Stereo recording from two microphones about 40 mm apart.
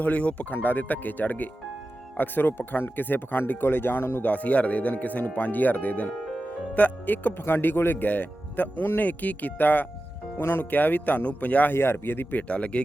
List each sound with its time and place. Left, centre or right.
0.0 s speech: left
0.5 s speech: left
4.2 s speech: left
11.7 s speech: left
12.5 s speech: left